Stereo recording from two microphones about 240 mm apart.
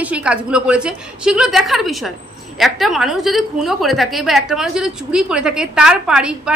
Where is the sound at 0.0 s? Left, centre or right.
Centre.